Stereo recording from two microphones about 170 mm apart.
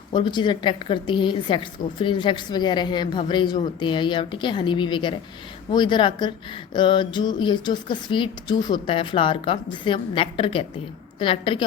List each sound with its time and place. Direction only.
0.1 s a woman's voice: 25° left (ahead or behind)